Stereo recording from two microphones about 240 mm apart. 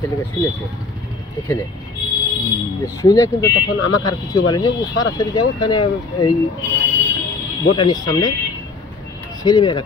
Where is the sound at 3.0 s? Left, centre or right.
Centre.